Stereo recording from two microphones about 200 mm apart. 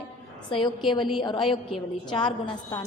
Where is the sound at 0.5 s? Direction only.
25° left (ahead or behind).